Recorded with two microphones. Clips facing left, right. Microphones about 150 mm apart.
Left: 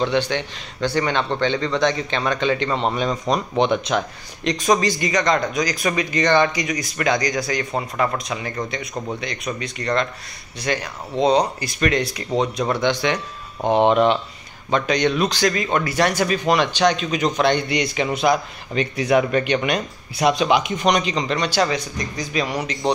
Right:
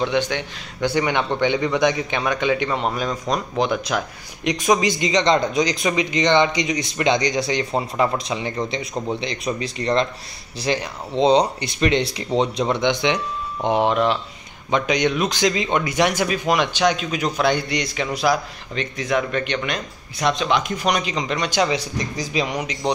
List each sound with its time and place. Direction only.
0.0 s a man's voice: 10° right (ahead or behind)
8.9 s speech: 5° right (ahead or behind)
9.2 s a man's voice: 25° right (ahead or behind)
13.7 s speech: 5° right (ahead or behind)
14.7 s a man's voice: 15° right (ahead or behind)
18.8 s speech: 10° left (ahead or behind)
20.8 s a man's voice: 5° right (ahead or behind)
21.7 s speech: 30° right (ahead or behind)
22.3 s a man's voice: 20° right (ahead or behind)